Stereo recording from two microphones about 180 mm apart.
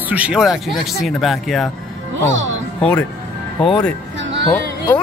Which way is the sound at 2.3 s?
90° right.